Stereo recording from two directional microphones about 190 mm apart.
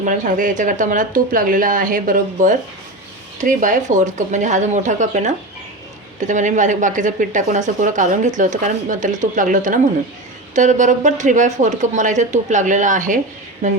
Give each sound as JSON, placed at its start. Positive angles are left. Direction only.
{"t": 0.0, "sound": "speech", "side_deg": -45}